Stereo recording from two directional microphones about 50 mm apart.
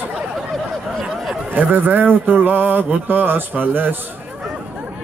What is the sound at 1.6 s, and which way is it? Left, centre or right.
Mantra, right.